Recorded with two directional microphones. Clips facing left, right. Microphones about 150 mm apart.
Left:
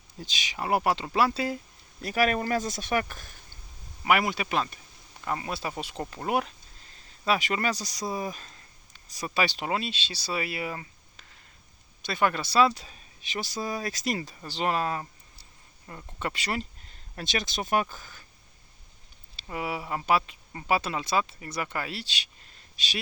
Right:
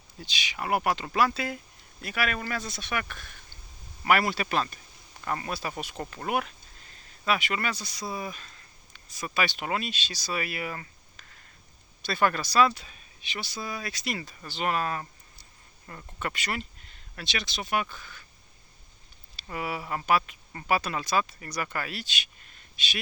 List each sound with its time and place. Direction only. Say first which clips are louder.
0.2 s speech: even; 40° left (ahead or behind)
0.6 s speech: left 1 dB; 30° left (ahead or behind)
4.0 s speech: even; 15° left (ahead or behind)
5.5 s speech: left 1 dB; 25° left (ahead or behind)
17.2 s speech: left 3 dB; 45° left (ahead or behind)
19.4 s speech: left 1 dB; 20° left (ahead or behind)